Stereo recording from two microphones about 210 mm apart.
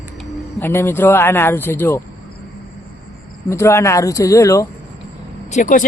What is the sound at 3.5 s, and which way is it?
Speech, 15° left (ahead or behind).